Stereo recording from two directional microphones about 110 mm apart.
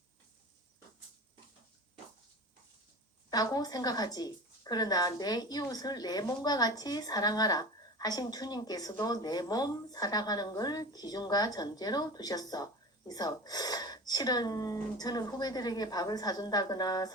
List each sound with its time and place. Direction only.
3.2 s a woman's voice: 35° left (ahead or behind)